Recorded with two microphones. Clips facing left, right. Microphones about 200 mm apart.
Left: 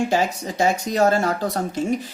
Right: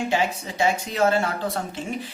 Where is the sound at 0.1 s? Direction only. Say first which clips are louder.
Left 3 dB; 40° left (ahead or behind).